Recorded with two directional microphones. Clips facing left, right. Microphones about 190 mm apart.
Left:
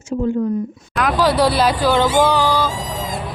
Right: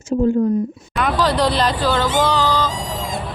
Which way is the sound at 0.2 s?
40° right (ahead or behind).